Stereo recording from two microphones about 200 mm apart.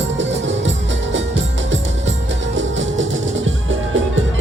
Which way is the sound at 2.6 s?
70° right (ahead or behind).